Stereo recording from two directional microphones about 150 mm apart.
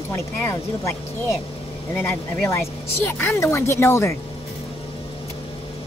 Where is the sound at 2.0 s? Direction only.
15° left (ahead or behind).